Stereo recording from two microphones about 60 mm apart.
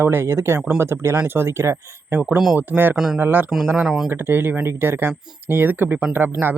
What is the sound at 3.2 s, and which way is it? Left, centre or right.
Speech, right.